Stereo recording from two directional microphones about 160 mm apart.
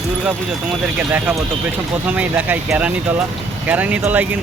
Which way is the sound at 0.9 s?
15° right (ahead or behind).